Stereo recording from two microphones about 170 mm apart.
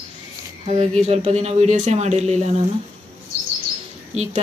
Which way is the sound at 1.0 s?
40° right (ahead or behind).